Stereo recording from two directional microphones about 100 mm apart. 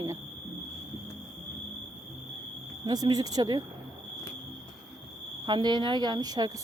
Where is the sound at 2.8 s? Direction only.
40° right (ahead or behind).